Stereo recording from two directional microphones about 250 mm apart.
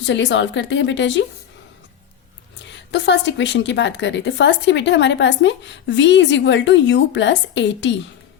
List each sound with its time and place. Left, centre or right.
0.0 s a woman's voice: left
2.9 s a woman's voice: left